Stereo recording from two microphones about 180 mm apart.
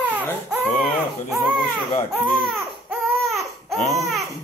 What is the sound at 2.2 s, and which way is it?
Baby cry, centre (ahead or behind).